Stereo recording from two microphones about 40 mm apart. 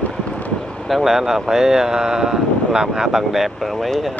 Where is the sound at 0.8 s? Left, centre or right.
Centre.